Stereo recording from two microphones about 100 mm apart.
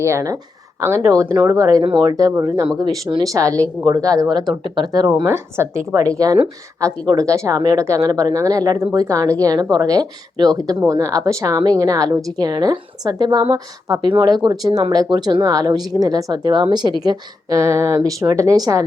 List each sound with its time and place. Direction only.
0.0 s a woman's voice: 30° right (ahead or behind)
1.8 s speech: 50° right (ahead or behind)
2.1 s a woman's voice: 35° right (ahead or behind)
5.2 s a woman's voice: 25° right (ahead or behind); by 7.9 s 45° right (ahead or behind)
7.9 s a woman's voice: 30° right (ahead or behind); by 16.6 s 50° right (ahead or behind)
17.0 s a woman's voice: 35° right (ahead or behind)